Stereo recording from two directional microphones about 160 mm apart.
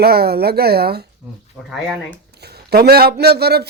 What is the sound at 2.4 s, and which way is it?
Speech, 85° right.